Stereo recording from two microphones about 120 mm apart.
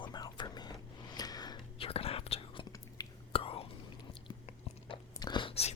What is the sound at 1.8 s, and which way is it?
Whispering, 55° left (ahead or behind).